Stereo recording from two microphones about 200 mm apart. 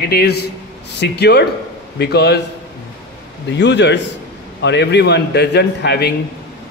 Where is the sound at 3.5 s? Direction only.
60° left (ahead or behind).